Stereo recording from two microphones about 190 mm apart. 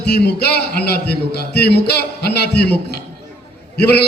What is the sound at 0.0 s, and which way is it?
A man's voice, 60° left (ahead or behind).